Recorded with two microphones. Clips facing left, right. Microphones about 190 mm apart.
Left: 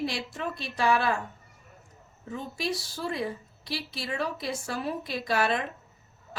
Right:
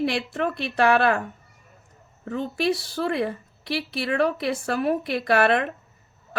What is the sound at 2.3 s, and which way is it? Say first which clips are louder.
A woman's voice: right 8 dB; 65° right (ahead or behind).